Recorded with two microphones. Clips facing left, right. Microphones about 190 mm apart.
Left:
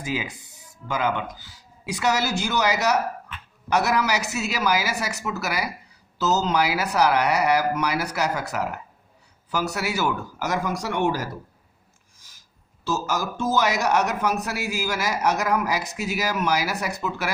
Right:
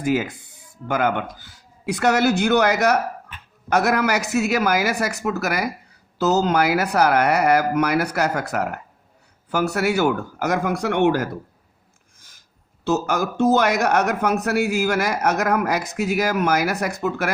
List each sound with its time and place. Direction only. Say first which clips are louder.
0.0 s speech: right 8 dB; 55° right (ahead or behind)
12.8 s speech: right 5 dB; 60° right (ahead or behind)